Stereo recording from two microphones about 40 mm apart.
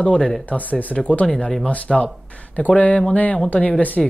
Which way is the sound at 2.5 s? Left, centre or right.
Left.